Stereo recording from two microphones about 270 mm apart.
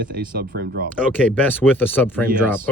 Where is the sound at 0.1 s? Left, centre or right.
Right.